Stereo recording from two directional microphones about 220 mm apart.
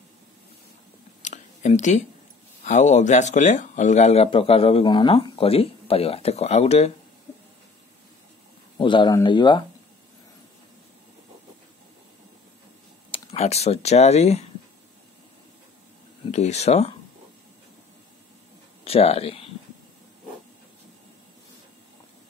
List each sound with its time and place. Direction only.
1.2 s a sound: 35° left (ahead or behind)
2.6 s speech: 30° left (ahead or behind)
8.7 s speech: 20° left (ahead or behind)
13.1 s speech: 25° left (ahead or behind)
16.3 s speech: 30° left (ahead or behind)
18.9 s speech: 25° left (ahead or behind)